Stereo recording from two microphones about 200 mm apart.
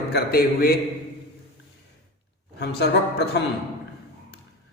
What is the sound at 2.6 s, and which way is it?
Speech, 60° left (ahead or behind).